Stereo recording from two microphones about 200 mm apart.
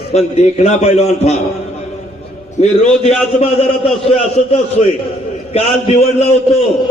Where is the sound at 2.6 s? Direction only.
30° left (ahead or behind).